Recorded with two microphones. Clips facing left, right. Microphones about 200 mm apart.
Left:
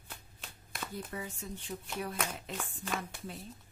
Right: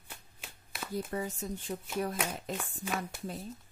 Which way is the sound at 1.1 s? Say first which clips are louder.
Right 6 dB; 40° right (ahead or behind).